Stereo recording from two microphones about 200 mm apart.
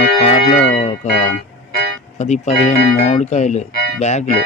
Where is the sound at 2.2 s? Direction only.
35° left (ahead or behind).